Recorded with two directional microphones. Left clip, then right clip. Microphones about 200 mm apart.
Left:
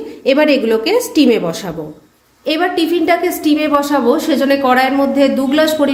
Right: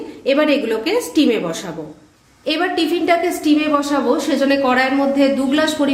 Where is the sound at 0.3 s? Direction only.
25° left (ahead or behind).